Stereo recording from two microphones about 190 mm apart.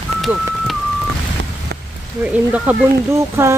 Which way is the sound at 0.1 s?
35° right (ahead or behind).